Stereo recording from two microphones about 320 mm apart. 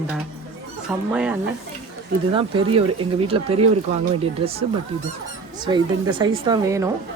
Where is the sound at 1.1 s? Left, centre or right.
Centre.